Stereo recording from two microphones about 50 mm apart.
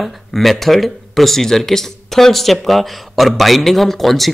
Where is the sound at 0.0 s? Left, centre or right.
Centre.